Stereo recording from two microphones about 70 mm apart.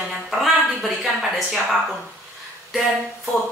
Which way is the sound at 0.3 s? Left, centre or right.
Centre.